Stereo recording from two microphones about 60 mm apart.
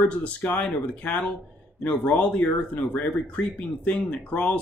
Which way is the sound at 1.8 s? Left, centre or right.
Left.